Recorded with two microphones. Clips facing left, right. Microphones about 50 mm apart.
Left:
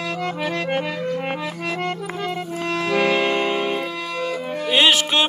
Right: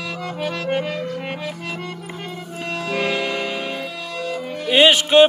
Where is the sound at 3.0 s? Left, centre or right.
Left.